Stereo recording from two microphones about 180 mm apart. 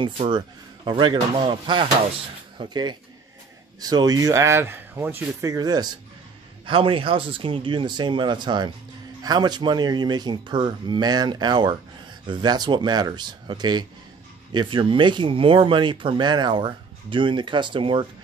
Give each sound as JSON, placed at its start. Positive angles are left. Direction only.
{"t": 0.8, "sound": "speech", "side_deg": -25}